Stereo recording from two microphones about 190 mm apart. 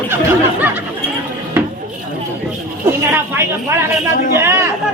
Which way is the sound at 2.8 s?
10° right (ahead or behind).